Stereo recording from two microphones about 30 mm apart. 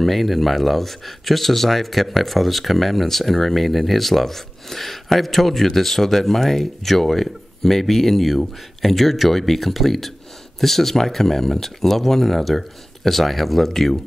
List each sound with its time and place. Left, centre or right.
0.0 s speech: centre